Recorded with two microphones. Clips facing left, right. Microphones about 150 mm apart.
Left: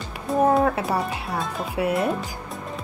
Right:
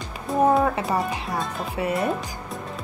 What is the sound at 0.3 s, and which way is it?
Speech, centre (ahead or behind).